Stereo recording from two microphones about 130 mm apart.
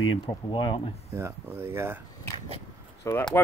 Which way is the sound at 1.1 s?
20° right (ahead or behind).